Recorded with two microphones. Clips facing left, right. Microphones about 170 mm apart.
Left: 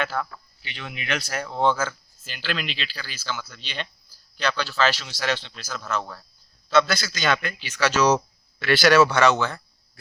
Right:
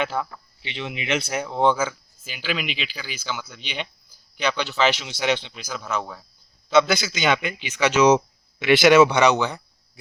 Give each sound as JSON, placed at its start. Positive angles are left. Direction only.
{"t": 0.0, "sound": "a man's voice", "side_deg": -15}